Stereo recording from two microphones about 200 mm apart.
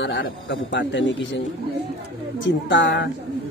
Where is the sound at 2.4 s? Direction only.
65° left (ahead or behind).